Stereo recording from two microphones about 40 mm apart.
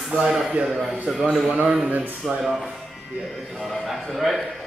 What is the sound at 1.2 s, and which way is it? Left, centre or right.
Speech, right.